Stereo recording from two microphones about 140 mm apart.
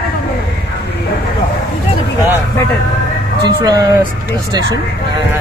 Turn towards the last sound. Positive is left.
turn(degrees=-25)  # may be behind; listen again after turning